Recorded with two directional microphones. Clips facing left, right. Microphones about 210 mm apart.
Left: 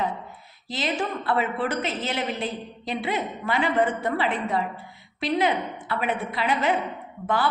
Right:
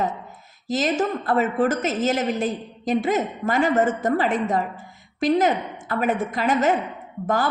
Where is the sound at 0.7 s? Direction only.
45° right (ahead or behind).